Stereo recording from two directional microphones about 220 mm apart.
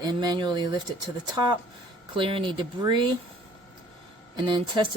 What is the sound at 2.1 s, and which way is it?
Speech, 25° right (ahead or behind).